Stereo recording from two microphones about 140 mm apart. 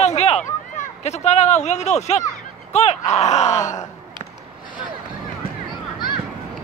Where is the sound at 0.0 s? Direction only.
50° left (ahead or behind).